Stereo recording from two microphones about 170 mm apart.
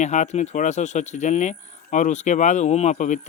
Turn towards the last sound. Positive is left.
turn(degrees=45)  # may be behind; listen again after turning